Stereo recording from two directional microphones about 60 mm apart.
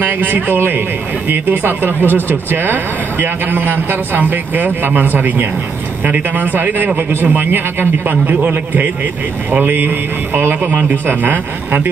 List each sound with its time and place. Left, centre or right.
0.0 s a man's voice: right